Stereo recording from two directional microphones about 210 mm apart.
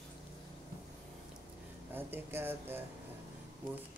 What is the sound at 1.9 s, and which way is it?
Speech, 10° right (ahead or behind).